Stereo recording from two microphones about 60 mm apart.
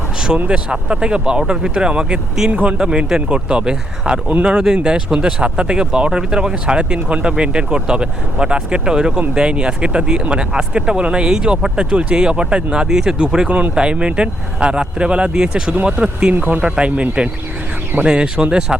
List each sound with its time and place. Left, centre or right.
0.3 s speech: right
2.5 s speech: right
2.7 s speech: centre